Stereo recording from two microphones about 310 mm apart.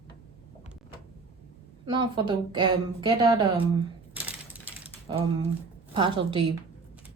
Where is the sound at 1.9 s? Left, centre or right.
Centre.